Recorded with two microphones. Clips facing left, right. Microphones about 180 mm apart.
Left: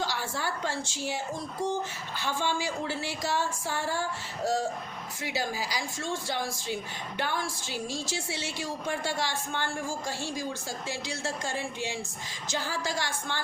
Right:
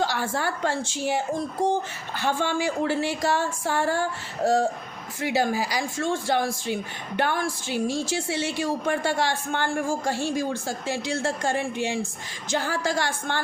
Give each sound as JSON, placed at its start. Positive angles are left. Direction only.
{"t": 0.0, "sound": "a woman's voice", "side_deg": -55}